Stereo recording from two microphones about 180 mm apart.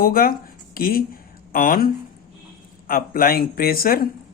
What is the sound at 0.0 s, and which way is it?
Speech, 55° left (ahead or behind).